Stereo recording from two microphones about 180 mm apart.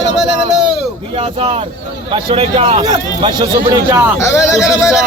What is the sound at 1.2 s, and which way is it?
Speech, 35° right (ahead or behind).